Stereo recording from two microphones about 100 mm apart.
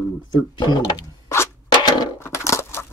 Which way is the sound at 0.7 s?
45° left (ahead or behind).